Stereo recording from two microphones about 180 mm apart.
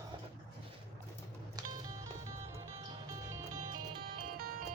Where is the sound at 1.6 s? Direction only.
20° right (ahead or behind).